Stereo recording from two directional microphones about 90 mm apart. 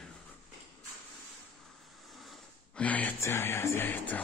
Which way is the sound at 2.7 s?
15° left (ahead or behind).